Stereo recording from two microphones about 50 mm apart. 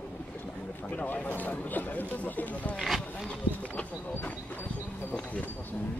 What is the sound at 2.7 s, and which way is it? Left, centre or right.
Speech, centre.